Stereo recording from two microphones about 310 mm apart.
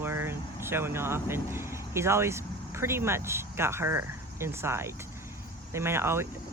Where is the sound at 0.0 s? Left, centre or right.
Centre.